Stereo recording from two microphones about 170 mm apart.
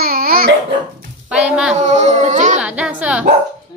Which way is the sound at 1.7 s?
45° right (ahead or behind).